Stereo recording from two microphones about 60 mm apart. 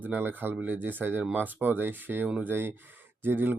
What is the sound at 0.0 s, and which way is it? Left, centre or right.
Speech, right.